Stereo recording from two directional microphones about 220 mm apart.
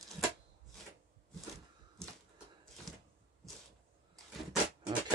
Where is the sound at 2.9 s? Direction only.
Centre (ahead or behind).